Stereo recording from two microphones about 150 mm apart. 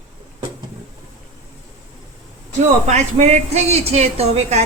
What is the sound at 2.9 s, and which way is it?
A woman's voice, 50° right (ahead or behind).